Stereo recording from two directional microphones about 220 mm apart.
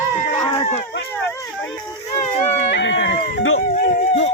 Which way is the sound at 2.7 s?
55° left (ahead or behind).